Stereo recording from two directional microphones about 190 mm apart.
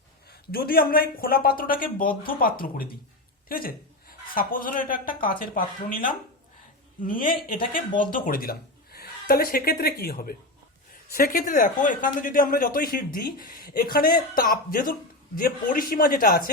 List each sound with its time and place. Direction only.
0.3 s speech: 50° left (ahead or behind)